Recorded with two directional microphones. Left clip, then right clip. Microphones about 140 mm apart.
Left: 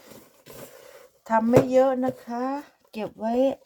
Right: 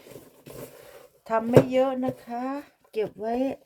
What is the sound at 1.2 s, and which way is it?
Speech, 20° left (ahead or behind).